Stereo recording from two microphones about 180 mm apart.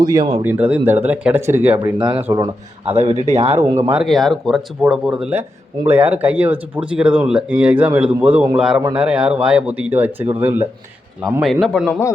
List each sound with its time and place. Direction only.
0.0 s speech: 20° right (ahead or behind)
0.4 s speech: 10° right (ahead or behind)
2.0 s speech: 30° right (ahead or behind)
2.2 s speech: 15° right (ahead or behind)
2.8 s speech: 35° right (ahead or behind)
3.6 s speech: 15° right (ahead or behind)
3.9 s speech: centre (ahead or behind)
11.2 s speech: centre (ahead or behind)